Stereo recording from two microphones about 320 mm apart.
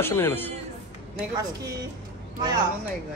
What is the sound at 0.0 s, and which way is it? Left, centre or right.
Speech, centre.